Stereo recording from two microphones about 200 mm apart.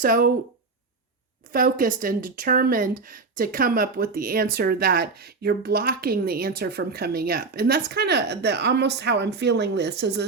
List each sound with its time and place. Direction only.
0.0 s speech: 45° right (ahead or behind)
1.5 s a woman's voice: 45° right (ahead or behind)